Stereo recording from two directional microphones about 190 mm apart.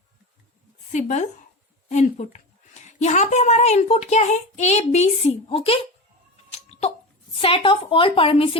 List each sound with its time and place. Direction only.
0.9 s a child's voice: 40° left (ahead or behind)
6.5 s a sound: 35° left (ahead or behind)
7.3 s a woman's voice: 30° left (ahead or behind)